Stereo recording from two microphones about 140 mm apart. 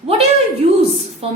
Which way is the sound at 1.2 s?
45° right (ahead or behind).